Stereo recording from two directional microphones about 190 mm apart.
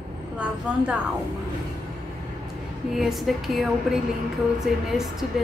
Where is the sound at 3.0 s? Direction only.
Centre (ahead or behind).